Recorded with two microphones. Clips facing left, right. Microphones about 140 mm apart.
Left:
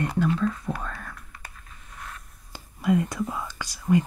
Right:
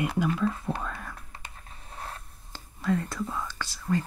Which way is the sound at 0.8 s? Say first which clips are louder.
Even; 5° right (ahead or behind).